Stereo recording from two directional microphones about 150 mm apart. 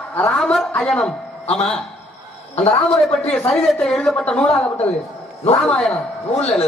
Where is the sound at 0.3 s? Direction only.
Centre (ahead or behind).